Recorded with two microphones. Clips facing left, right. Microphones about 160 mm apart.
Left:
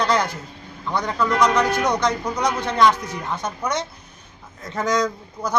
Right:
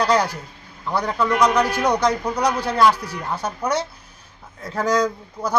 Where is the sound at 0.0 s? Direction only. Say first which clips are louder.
Right 2 dB; 10° right (ahead or behind).